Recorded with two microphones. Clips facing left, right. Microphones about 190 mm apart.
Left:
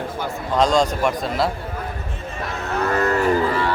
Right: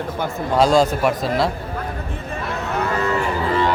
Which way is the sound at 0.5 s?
5° right (ahead or behind).